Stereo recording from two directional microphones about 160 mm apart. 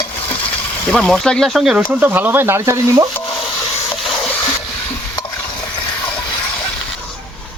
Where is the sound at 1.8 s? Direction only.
15° right (ahead or behind).